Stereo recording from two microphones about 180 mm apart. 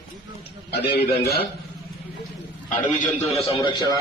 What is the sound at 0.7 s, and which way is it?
Speech, 60° left (ahead or behind).